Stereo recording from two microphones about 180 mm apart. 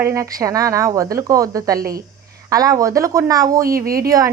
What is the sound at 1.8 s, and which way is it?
Speech, 55° right (ahead or behind).